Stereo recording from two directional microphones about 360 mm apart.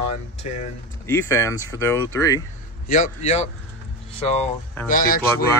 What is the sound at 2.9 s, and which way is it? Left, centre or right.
Speech, centre.